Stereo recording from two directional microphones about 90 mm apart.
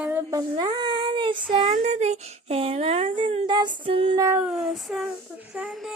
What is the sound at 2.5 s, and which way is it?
Speech, 90° right.